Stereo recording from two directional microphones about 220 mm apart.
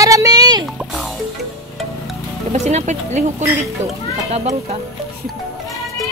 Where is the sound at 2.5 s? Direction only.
30° right (ahead or behind).